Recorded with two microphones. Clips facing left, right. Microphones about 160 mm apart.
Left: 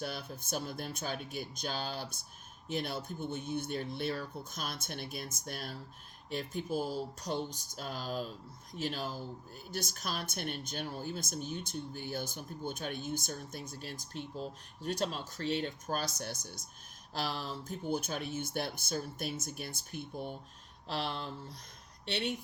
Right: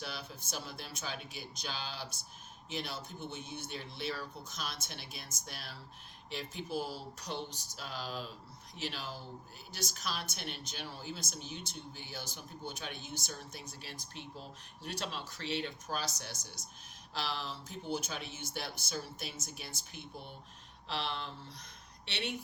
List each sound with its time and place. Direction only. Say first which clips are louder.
0.0 s speech: left 4 dB; 50° left (ahead or behind)